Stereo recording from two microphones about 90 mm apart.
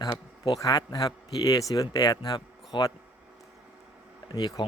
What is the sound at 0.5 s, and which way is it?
Speech, 45° left (ahead or behind).